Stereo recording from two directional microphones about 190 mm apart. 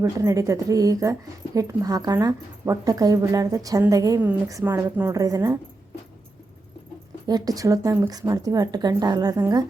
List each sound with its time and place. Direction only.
0.0 s a woman's voice: 15° right (ahead or behind)
7.3 s a woman's voice: 20° right (ahead or behind)